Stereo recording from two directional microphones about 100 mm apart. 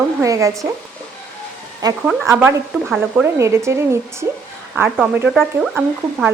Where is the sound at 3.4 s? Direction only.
30° right (ahead or behind); by 5.3 s 10° right (ahead or behind).